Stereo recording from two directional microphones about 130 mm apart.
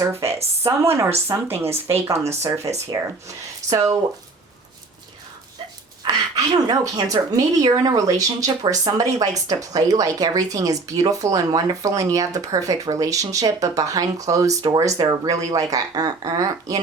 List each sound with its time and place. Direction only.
0.0 s speech: 20° right (ahead or behind)
0.3 s speech: 50° right (ahead or behind)
0.8 s speech: 20° right (ahead or behind)
6.1 s speech: 30° right (ahead or behind)